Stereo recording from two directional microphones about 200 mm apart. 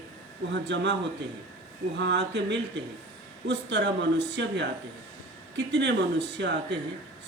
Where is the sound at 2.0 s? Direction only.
60° right (ahead or behind).